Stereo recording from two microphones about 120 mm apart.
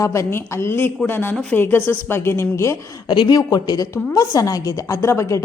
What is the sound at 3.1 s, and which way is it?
A woman's voice, 35° left (ahead or behind).